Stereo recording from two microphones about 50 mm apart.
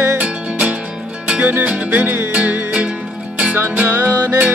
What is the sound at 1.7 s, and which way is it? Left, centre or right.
Music, right.